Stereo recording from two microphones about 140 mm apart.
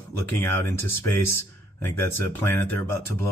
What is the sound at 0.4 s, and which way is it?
Speech, 15° left (ahead or behind).